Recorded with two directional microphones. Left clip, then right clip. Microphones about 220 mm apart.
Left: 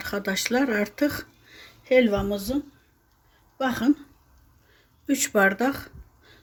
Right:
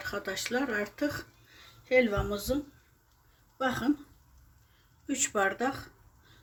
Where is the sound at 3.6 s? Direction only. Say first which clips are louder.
Left 6 dB; 35° left (ahead or behind).